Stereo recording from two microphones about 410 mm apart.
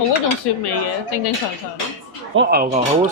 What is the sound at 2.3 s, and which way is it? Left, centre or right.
Speech, right.